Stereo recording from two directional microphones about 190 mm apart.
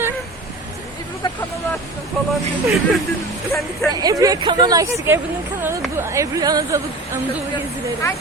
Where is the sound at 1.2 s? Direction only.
25° left (ahead or behind).